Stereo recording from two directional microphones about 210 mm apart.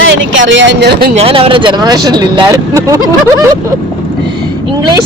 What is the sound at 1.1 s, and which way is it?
Speech, 25° right (ahead or behind).